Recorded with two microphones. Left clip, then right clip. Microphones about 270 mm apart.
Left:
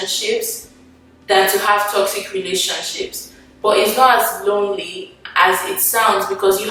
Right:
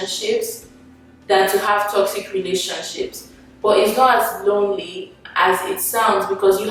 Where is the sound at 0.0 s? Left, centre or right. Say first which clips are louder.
Left 1 dB; centre.